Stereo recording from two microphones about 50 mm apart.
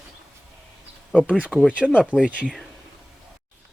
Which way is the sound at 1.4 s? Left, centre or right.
Centre.